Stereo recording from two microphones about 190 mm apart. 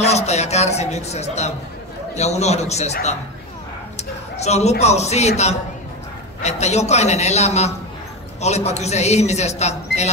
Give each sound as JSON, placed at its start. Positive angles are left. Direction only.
{"t": 0.0, "sound": "a sound", "side_deg": 35}
{"t": 2.1, "sound": "a man's voice", "side_deg": 35}
{"t": 6.4, "sound": "a man's voice", "side_deg": 35}